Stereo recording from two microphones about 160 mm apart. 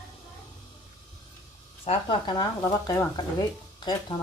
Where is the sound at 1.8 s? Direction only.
30° left (ahead or behind).